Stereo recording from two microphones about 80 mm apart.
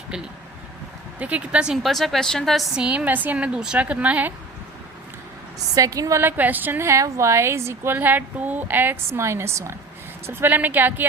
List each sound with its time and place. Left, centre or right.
1.2 s a woman's voice: centre
1.8 s a woman's voice: centre
2.8 s a woman's voice: centre
5.7 s a woman's voice: right
6.2 s a woman's voice: right
6.8 s a woman's voice: right